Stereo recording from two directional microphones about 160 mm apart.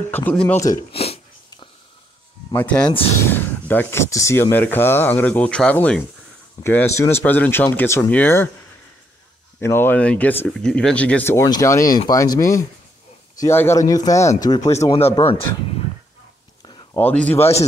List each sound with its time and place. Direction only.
0.1 s speech: 10° left (ahead or behind)
0.9 s a sound: 40° left (ahead or behind)
2.5 s speech: 10° left (ahead or behind)
9.6 s speech: 15° left (ahead or behind)
14.8 s speech: 40° left (ahead or behind)
16.6 s a sound: 30° left (ahead or behind)
17.0 s speech: 10° left (ahead or behind)